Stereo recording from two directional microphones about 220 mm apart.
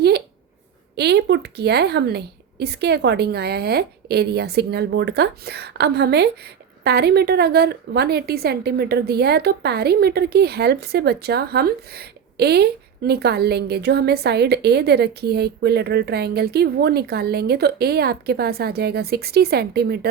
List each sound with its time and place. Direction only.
0.9 s speech: 50° right (ahead or behind)